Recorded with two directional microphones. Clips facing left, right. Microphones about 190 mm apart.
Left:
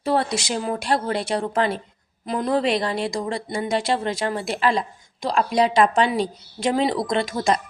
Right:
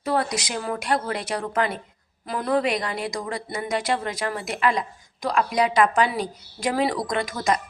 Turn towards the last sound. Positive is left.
turn(degrees=30)  # may be behind; listen again after turning